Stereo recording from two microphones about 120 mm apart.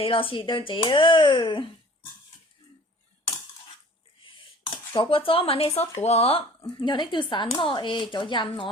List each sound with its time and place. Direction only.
0.0 s speech: 45° left (ahead or behind)
4.9 s speech: 50° left (ahead or behind)
6.7 s speech: 40° left (ahead or behind)